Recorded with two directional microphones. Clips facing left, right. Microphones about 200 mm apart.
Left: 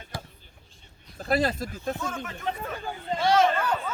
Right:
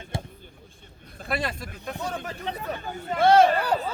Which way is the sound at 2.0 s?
35° right (ahead or behind).